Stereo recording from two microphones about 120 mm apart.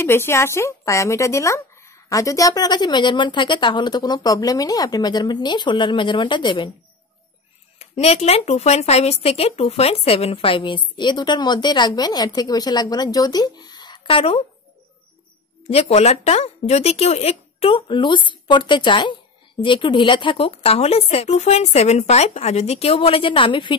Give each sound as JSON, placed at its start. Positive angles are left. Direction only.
{"t": 0.0, "sound": "speech", "side_deg": 20}
{"t": 7.8, "sound": "a woman's voice", "side_deg": 60}
{"t": 15.7, "sound": "a woman's voice", "side_deg": 60}